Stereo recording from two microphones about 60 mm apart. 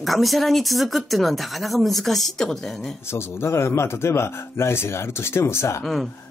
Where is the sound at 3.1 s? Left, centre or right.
Left.